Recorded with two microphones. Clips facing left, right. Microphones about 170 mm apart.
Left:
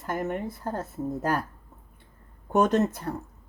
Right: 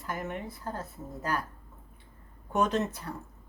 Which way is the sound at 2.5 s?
45° left (ahead or behind).